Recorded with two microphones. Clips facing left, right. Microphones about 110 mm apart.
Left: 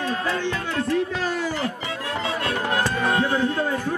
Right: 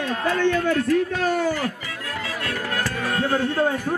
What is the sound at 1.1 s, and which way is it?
Speech, 50° right (ahead or behind).